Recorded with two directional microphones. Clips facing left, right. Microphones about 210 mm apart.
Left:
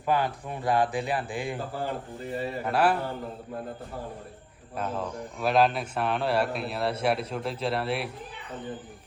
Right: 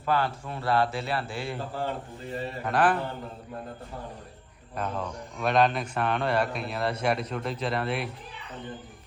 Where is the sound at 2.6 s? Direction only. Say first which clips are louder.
Even; 5° left (ahead or behind).